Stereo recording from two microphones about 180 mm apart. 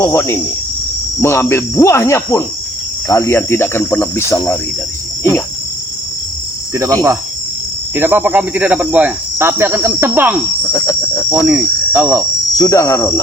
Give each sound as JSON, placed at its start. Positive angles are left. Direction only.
{"t": 0.0, "sound": "cricket", "side_deg": 15}
{"t": 7.9, "sound": "cricket", "side_deg": -10}
{"t": 10.7, "sound": "cricket", "side_deg": 20}
{"t": 11.3, "sound": "cricket", "side_deg": -10}
{"t": 12.5, "sound": "cricket", "side_deg": 15}